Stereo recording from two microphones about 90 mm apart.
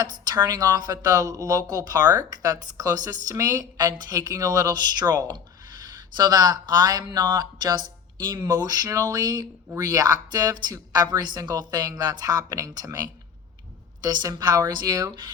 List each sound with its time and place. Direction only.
0.0 s speech: 50° right (ahead or behind)